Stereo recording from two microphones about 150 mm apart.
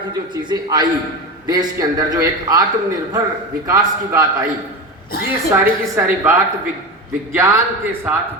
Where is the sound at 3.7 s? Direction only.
20° right (ahead or behind).